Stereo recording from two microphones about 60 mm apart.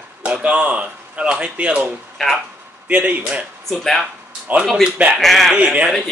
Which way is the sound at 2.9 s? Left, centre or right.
Right.